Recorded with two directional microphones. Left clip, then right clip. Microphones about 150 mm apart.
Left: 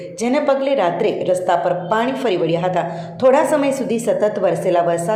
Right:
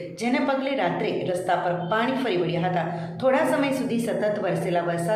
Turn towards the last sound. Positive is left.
turn(degrees=45)  # may be behind; listen again after turning